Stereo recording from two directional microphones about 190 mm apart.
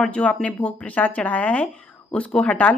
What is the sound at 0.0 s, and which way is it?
A woman's voice, 5° left (ahead or behind).